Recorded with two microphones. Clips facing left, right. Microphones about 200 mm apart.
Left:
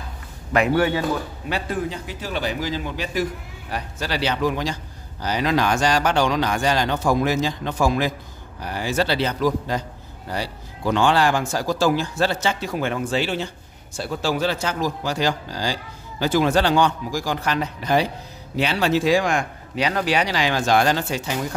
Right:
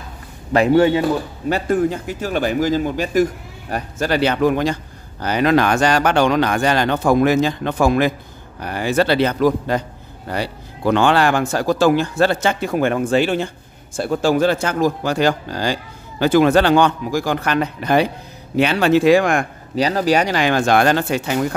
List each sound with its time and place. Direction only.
0.5 s a man's voice: 30° right (ahead or behind)
1.5 s a man's voice: 50° right (ahead or behind)
19.7 s speech: 35° right (ahead or behind); by 21.5 s 60° right (ahead or behind)